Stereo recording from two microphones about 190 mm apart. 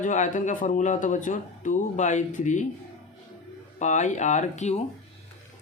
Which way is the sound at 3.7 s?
40° left (ahead or behind).